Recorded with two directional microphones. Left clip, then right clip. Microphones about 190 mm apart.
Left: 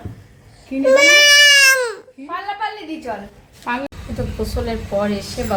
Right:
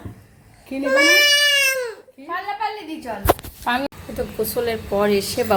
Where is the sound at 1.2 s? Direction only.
35° left (ahead or behind).